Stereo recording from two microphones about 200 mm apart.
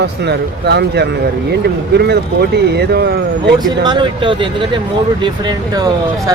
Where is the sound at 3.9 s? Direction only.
25° right (ahead or behind).